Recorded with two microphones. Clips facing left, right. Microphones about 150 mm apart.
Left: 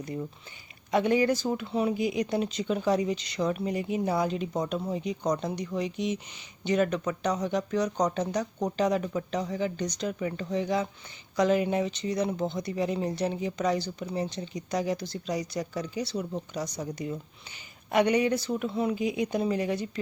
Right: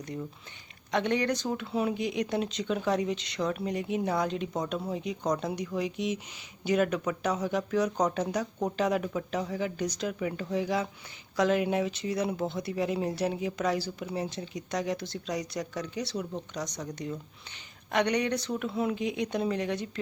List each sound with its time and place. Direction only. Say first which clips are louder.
0.9 s speech: left 4 dB; 5° left (ahead or behind)